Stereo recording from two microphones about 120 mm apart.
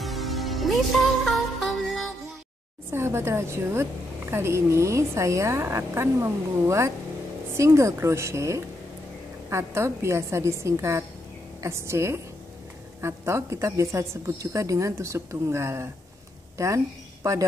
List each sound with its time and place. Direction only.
0.0 s music: centre (ahead or behind)
2.9 s a woman's voice: 20° right (ahead or behind)